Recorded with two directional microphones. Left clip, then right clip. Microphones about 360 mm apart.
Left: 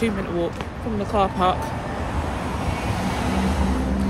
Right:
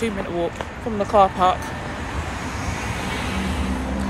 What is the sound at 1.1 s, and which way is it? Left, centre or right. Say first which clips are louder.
Speech: right 4 dB; centre.